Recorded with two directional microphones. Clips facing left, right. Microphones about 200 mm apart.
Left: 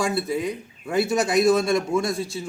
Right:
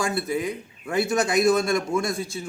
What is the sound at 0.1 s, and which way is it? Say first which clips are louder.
A man's voice: left 1 dB; centre (ahead or behind).